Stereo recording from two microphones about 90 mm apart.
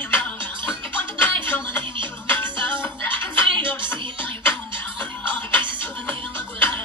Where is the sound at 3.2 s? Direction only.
65° right (ahead or behind).